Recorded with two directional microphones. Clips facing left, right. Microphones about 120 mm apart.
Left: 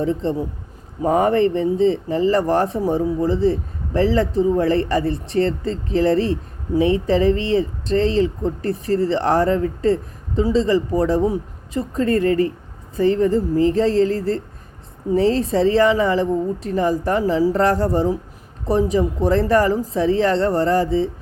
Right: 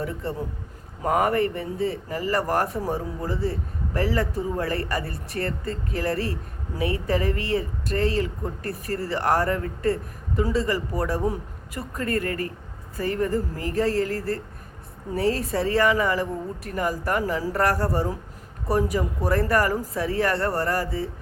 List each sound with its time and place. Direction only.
0.0 s speech: 25° left (ahead or behind)